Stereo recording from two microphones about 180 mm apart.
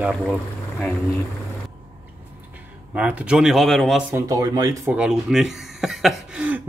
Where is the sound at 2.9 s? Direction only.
10° right (ahead or behind).